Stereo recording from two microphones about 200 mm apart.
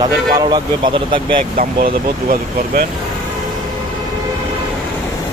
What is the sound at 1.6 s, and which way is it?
Speech, 45° right (ahead or behind).